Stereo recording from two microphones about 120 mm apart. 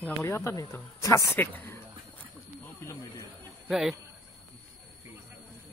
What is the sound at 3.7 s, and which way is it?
Speech, 5° right (ahead or behind).